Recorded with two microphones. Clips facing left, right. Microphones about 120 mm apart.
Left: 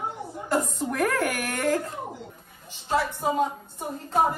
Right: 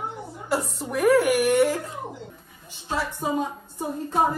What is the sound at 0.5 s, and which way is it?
Speech, 5° right (ahead or behind).